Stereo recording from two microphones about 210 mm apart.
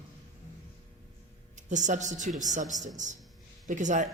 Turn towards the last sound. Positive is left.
turn(degrees=-35)  # may be behind; listen again after turning